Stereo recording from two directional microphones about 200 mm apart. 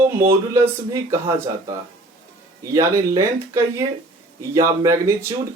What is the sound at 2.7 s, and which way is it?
Speech, 15° right (ahead or behind).